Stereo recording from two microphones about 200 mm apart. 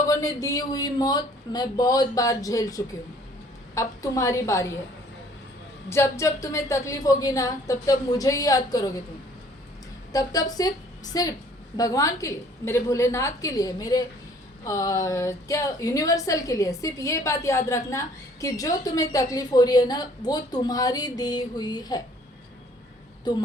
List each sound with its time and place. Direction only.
0.0 s a woman's voice: 15° left (ahead or behind)
5.9 s a woman's voice: 15° left (ahead or behind)
10.1 s a woman's voice: 15° left (ahead or behind)
23.3 s a woman's voice: 20° left (ahead or behind)